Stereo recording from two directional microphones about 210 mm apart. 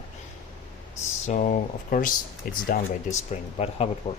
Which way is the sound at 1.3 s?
35° left (ahead or behind).